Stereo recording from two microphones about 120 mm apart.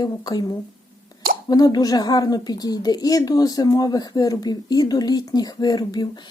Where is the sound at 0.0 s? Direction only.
35° left (ahead or behind).